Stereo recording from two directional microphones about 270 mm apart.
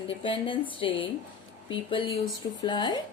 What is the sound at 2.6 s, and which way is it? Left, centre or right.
Speech, centre.